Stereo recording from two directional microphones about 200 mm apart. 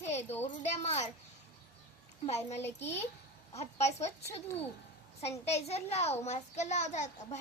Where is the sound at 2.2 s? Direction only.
35° left (ahead or behind).